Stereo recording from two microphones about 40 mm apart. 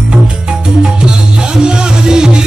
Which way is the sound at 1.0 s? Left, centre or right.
Right.